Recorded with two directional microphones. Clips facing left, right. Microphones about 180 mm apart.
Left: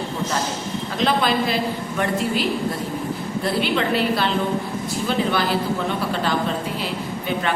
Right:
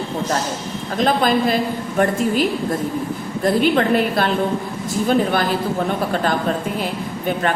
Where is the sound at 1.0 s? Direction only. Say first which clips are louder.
Right 3 dB; 45° right (ahead or behind).